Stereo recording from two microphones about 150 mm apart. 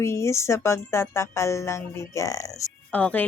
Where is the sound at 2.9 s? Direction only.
10° left (ahead or behind).